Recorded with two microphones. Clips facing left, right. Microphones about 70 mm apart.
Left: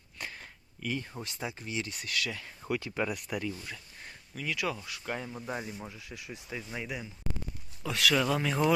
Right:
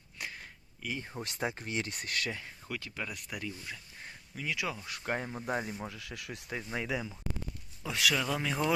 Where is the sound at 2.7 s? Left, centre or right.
Left.